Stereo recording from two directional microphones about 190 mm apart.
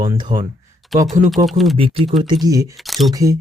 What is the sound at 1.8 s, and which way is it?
Speech, 30° right (ahead or behind).